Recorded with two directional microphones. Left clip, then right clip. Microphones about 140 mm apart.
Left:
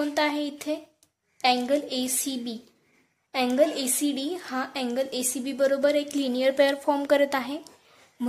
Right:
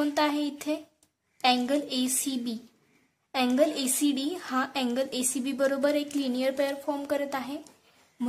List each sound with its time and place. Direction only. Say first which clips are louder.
0.0 s a woman's voice: left 1 dB; centre (ahead or behind)